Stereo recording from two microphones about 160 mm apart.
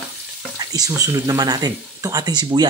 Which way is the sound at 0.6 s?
20° right (ahead or behind).